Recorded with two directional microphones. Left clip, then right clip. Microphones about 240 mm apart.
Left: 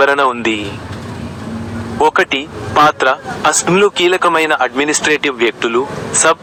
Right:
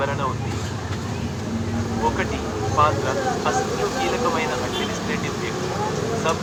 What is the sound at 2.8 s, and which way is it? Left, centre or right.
Speech, left.